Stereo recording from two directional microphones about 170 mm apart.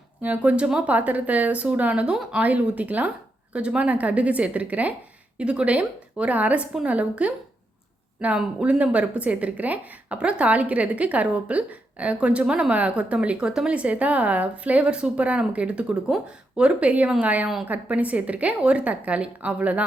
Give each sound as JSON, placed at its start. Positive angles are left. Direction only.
{"t": 0.2, "sound": "a woman's voice", "side_deg": -10}